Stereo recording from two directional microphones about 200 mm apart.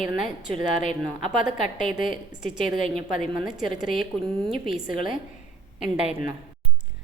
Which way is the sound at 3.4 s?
5° right (ahead or behind).